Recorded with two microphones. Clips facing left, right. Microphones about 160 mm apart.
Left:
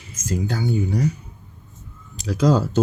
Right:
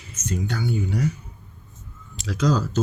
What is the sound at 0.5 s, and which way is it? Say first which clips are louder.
Speech: left 3 dB; 35° left (ahead or behind).